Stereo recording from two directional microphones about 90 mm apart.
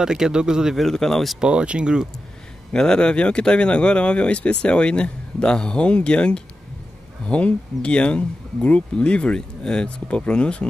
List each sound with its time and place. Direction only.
0.0 s speech: 10° right (ahead or behind)
1.5 s speech: 10° right (ahead or behind)
2.7 s speech: 10° left (ahead or behind)